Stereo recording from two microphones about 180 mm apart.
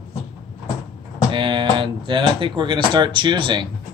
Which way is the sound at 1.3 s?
25° right (ahead or behind).